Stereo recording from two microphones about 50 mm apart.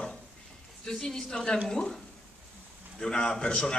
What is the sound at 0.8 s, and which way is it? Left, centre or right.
A man's voice, centre.